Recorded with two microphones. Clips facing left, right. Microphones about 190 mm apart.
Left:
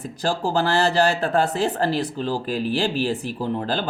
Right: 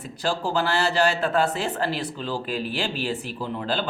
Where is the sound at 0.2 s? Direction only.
40° left (ahead or behind).